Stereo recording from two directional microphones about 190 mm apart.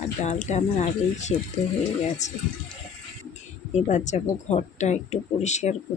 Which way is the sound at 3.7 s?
40° left (ahead or behind).